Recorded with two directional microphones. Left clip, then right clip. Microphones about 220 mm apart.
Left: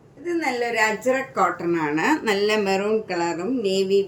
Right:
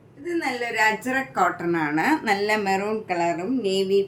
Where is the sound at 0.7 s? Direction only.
15° right (ahead or behind).